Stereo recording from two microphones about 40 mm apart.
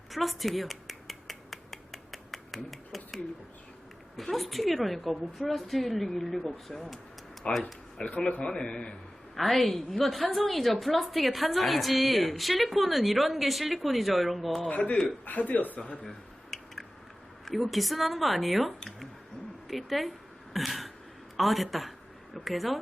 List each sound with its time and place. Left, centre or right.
0.1 s a sound: centre
4.2 s a woman's voice: centre
7.4 s a man's voice: left
8.5 s a man's voice: left
9.3 s a woman's voice: centre
14.7 s a man's voice: left
16.0 s a sound: centre
17.4 s a woman's voice: centre